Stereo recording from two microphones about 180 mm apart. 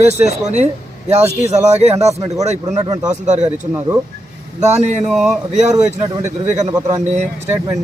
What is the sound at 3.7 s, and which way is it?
Speech, 15° right (ahead or behind).